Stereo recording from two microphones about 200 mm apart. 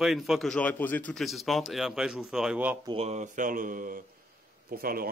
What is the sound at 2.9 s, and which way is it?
Speech, 30° right (ahead or behind).